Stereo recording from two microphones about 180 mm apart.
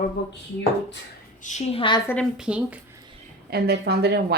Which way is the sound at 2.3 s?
5° right (ahead or behind).